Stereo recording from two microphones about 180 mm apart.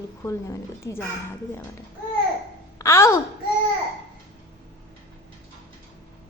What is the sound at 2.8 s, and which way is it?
Speech, 15° left (ahead or behind).